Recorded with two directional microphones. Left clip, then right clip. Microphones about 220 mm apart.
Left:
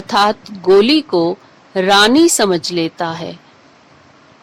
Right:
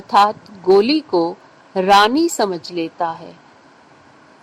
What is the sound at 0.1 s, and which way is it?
Speech, 25° left (ahead or behind).